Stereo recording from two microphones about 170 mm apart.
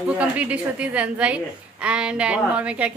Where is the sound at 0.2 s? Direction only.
10° right (ahead or behind).